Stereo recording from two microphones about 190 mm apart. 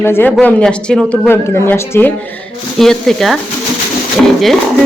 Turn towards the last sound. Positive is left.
turn(degrees=0)  # may be behind; listen again after turning